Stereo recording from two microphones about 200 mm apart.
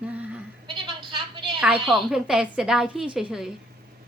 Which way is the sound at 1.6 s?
5° right (ahead or behind).